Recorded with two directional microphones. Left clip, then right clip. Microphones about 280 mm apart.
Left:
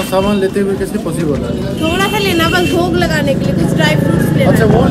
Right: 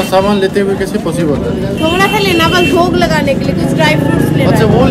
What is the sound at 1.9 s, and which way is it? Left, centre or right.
Speech, centre.